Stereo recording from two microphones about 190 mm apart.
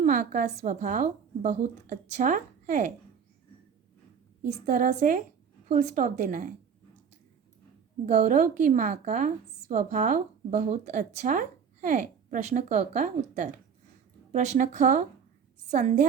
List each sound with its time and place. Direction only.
0.0 s a woman's voice: 40° right (ahead or behind)
4.4 s a woman's voice: 40° right (ahead or behind)
8.0 s a woman's voice: 40° right (ahead or behind)